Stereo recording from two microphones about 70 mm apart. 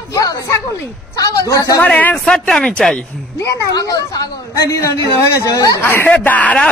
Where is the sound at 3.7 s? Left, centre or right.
Left.